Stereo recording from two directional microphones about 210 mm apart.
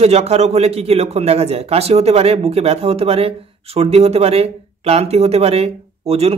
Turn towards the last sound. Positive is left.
turn(degrees=-30)  # may be behind; listen again after turning